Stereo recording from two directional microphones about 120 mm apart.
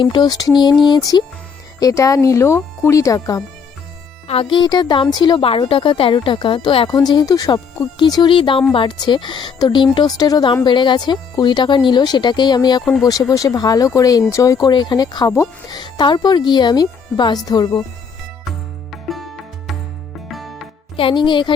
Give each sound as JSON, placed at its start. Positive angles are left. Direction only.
{"t": 0.0, "sound": "a woman's voice", "side_deg": 40}
{"t": 4.3, "sound": "a woman's voice", "side_deg": 45}
{"t": 5.4, "sound": "a woman's voice", "side_deg": 50}
{"t": 15.8, "sound": "a woman's voice", "side_deg": 40}
{"t": 18.9, "sound": "music", "side_deg": 0}
{"t": 20.9, "sound": "speech", "side_deg": 45}